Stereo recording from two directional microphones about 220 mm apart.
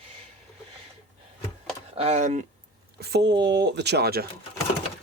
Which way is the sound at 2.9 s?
50° right (ahead or behind).